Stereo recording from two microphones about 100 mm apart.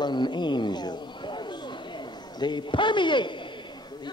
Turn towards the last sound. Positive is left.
turn(degrees=50)  # may be behind; listen again after turning